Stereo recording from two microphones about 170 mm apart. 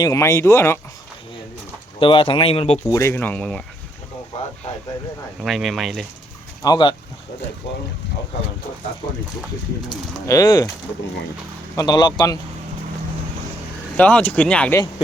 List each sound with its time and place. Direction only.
0.0 s speech: 20° left (ahead or behind)
2.0 s speech: 30° left (ahead or behind)
2.7 s speech: 20° left (ahead or behind)
5.4 s speech: centre (ahead or behind)
6.6 s speech: 25° left (ahead or behind)
10.2 s speech: 20° left (ahead or behind)
11.8 s speech: 25° left (ahead or behind)
13.9 s speech: 10° left (ahead or behind)